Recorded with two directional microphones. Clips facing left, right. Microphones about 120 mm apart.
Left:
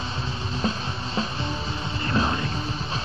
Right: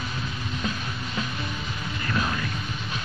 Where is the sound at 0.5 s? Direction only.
30° left (ahead or behind).